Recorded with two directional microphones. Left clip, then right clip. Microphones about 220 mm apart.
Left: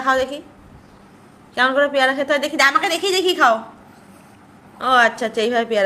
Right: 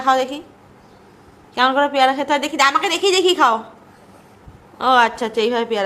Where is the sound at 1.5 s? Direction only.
10° right (ahead or behind).